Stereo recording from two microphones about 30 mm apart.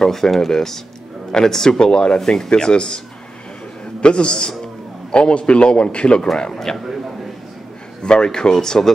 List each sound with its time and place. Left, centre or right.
0.0 s speech: centre; by 2.1 s left
2.1 s speech: centre
2.5 s speech: left
4.0 s a man's voice: left
4.3 s speech: left
5.3 s speech: left
6.5 s speech: centre
8.0 s speech: left